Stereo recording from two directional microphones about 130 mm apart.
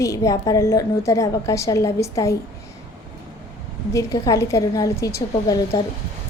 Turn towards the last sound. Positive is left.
turn(degrees=30)  # may be behind; listen again after turning